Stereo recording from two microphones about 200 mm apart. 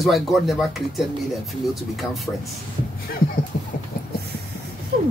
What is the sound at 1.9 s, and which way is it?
Speech, centre (ahead or behind).